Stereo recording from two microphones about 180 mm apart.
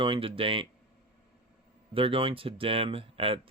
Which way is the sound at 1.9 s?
30° right (ahead or behind).